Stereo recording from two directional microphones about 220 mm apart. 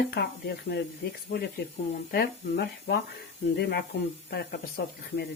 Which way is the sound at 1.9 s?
45° left (ahead or behind).